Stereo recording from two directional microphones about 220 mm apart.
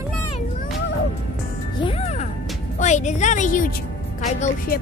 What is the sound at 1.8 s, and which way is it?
Music, 25° left (ahead or behind).